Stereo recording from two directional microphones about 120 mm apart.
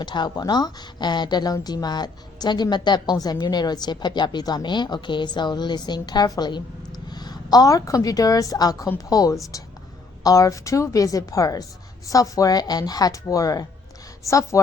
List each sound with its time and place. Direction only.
0.0 s a woman's voice: 40° left (ahead or behind)